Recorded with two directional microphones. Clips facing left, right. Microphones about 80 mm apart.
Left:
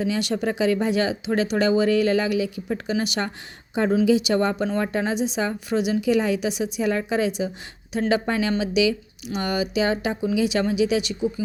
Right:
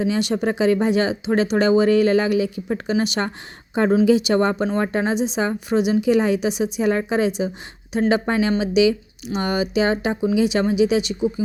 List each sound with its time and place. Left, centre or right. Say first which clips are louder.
0.0 s speech: right 3 dB; right